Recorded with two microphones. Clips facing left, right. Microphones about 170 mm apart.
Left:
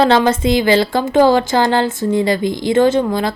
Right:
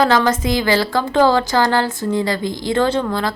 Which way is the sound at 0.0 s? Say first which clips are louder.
Left 3 dB; 25° left (ahead or behind).